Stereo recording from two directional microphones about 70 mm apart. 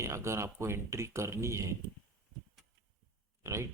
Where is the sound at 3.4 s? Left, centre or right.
Right.